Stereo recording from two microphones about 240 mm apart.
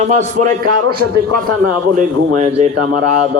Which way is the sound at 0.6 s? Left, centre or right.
Right.